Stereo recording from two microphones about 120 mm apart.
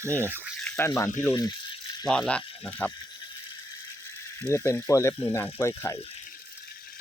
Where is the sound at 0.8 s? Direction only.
20° left (ahead or behind).